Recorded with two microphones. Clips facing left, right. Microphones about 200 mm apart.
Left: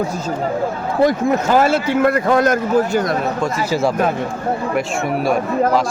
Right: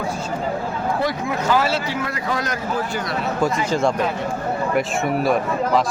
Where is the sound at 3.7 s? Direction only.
5° left (ahead or behind).